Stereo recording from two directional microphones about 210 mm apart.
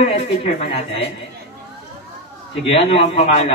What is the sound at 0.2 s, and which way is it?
Speech, 30° left (ahead or behind).